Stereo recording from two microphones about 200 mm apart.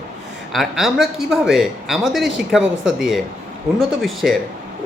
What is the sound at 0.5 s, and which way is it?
A man's voice, centre (ahead or behind).